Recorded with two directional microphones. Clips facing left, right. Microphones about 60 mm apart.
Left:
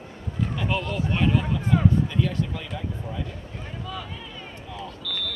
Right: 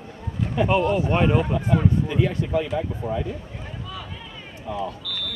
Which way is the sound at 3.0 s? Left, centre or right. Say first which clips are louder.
Right 9 dB; centre.